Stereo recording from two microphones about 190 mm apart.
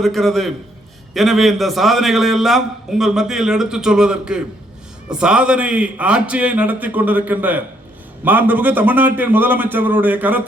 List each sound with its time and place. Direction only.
0.0 s a man's voice: centre (ahead or behind)